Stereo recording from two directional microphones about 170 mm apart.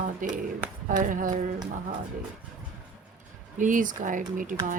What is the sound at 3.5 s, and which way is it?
Speech, 50° right (ahead or behind).